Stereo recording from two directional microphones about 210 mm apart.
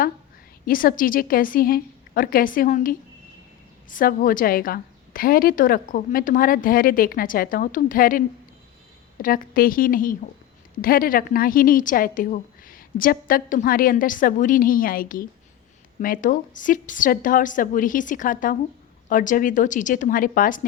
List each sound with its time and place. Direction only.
0.6 s a woman's voice: 45° left (ahead or behind)
9.2 s a woman's voice: 45° left (ahead or behind)